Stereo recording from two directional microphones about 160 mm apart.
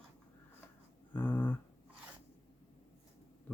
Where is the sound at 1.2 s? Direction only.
10° left (ahead or behind).